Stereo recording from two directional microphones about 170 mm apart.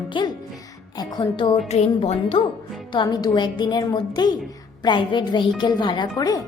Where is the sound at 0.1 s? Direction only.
25° left (ahead or behind).